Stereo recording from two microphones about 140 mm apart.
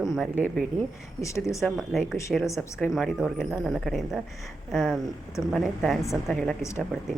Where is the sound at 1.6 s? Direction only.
Centre (ahead or behind).